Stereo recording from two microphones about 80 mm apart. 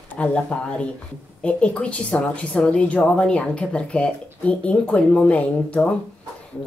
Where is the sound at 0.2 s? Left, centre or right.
Centre.